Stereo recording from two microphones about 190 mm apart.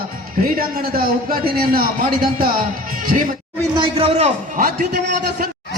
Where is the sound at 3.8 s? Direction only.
30° right (ahead or behind).